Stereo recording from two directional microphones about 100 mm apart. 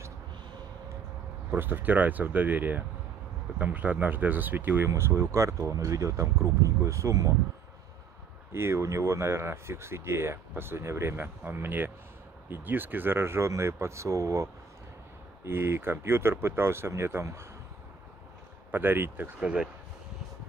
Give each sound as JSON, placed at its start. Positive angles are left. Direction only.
{"t": 1.5, "sound": "speech", "side_deg": -20}
{"t": 8.5, "sound": "speech", "side_deg": -25}
{"t": 18.7, "sound": "speech", "side_deg": -20}
{"t": 19.4, "sound": "speech", "side_deg": -10}